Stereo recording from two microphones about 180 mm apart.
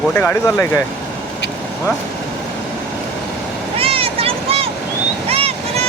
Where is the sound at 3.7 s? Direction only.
30° right (ahead or behind).